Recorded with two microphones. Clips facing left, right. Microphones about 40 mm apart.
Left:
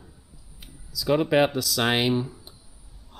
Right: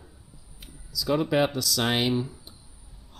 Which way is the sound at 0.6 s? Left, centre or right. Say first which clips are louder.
Left 2 dB; centre.